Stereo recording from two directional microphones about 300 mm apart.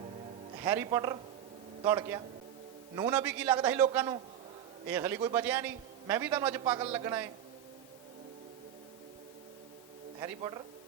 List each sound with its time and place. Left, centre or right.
0.6 s a man's voice: centre
10.2 s a man's voice: centre